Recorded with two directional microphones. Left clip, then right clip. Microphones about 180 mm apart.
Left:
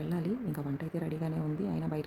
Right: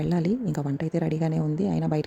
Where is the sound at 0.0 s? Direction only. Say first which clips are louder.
Right 9 dB; 40° right (ahead or behind).